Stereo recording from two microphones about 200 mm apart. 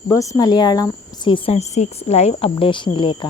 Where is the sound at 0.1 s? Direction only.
15° left (ahead or behind).